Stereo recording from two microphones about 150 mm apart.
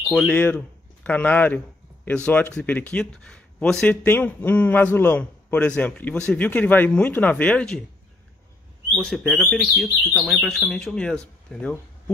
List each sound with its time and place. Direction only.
0.3 s speech: 10° left (ahead or behind)
8.9 s speech: 5° left (ahead or behind)